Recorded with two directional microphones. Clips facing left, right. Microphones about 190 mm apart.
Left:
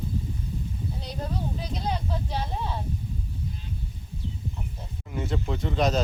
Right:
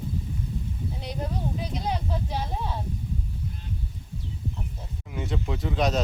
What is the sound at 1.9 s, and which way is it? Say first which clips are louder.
Speech: even; 10° right (ahead or behind).